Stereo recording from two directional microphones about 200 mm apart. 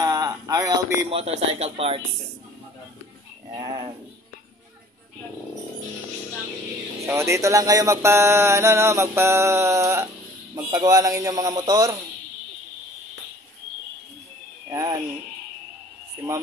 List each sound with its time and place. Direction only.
0.0 s a sound: 20° right (ahead or behind)
1.1 s speech: 30° right (ahead or behind)
3.5 s speech: 25° right (ahead or behind)
7.1 s music: 15° right (ahead or behind)
14.7 s speech: 20° right (ahead or behind)